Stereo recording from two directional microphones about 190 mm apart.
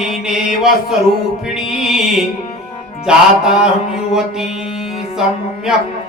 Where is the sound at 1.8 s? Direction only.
Centre (ahead or behind).